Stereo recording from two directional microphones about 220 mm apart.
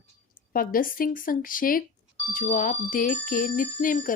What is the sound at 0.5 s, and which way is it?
Speech, 40° left (ahead or behind).